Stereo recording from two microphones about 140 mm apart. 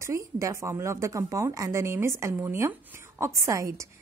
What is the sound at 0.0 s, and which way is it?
A woman's voice, 20° right (ahead or behind).